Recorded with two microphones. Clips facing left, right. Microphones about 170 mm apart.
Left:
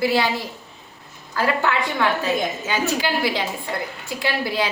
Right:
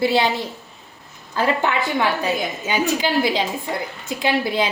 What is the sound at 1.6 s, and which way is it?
A woman's voice, 15° right (ahead or behind).